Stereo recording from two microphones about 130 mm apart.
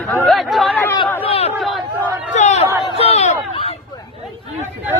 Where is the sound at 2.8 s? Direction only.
50° left (ahead or behind).